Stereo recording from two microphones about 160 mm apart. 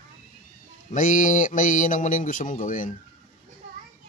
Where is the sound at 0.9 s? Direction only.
55° left (ahead or behind).